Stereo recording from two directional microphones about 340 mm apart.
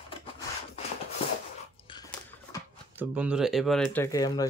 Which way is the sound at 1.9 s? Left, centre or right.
Centre.